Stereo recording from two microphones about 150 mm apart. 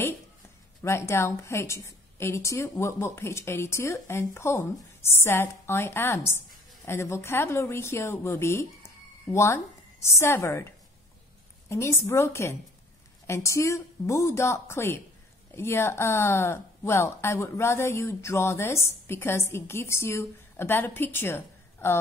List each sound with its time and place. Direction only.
0.8 s a woman's voice: 20° left (ahead or behind)
11.7 s a woman's voice: 20° left (ahead or behind)